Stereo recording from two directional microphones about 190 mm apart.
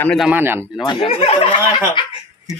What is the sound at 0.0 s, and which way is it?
Speech, 5° left (ahead or behind).